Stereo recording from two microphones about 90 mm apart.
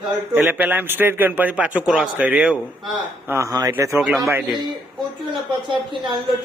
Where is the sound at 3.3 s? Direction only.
35° right (ahead or behind).